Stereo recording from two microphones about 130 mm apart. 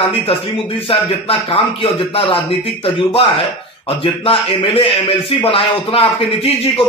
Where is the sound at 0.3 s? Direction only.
45° left (ahead or behind).